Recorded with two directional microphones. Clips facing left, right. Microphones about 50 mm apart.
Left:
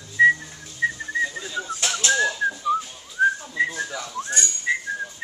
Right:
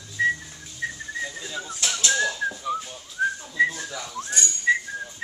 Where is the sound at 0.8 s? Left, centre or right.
Centre.